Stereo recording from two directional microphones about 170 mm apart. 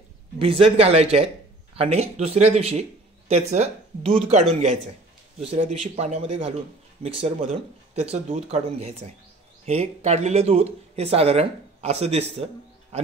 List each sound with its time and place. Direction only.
0.4 s speech: 35° right (ahead or behind)